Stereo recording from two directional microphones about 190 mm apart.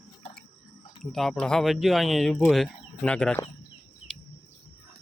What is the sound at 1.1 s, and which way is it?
Speech, centre (ahead or behind).